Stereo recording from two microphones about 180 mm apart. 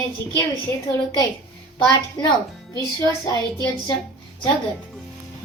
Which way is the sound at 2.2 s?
25° left (ahead or behind).